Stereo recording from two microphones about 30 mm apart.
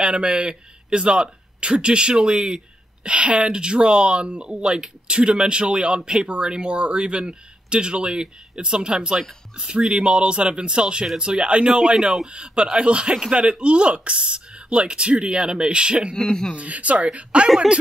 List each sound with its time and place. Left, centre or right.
0.0 s speech: right
3.1 s speech: right
11.6 s speech: right
13.5 s speech: right
16.2 s speech: left
16.5 s speech: right